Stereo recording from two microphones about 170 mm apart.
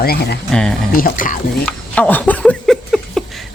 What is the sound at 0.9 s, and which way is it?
Speech, 55° left (ahead or behind).